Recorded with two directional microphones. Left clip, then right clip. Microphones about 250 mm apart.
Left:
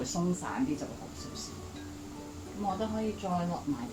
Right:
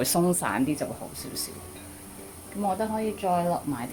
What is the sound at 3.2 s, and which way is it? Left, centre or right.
Speech, right.